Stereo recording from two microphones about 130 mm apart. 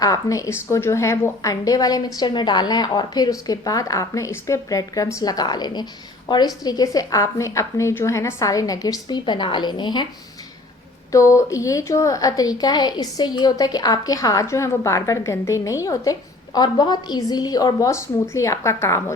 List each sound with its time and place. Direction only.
0.0 s a woman's voice: 25° left (ahead or behind)
11.1 s a woman's voice: 25° left (ahead or behind)